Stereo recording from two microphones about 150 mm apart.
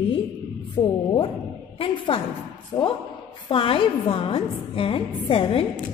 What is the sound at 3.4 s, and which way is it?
A woman's voice, 35° left (ahead or behind).